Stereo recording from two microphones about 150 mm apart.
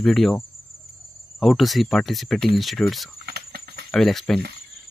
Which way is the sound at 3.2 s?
90° right.